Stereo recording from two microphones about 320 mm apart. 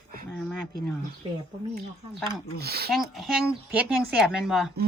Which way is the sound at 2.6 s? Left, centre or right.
Right.